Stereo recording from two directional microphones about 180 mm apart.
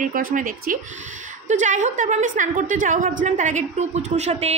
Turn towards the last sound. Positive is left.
turn(degrees=-35)  # may be behind; listen again after turning